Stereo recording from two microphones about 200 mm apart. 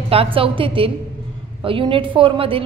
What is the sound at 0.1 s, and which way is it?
A woman's voice, 30° right (ahead or behind).